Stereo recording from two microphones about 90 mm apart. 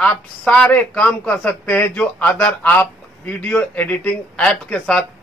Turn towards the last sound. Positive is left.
turn(degrees=10)  # may be behind; listen again after turning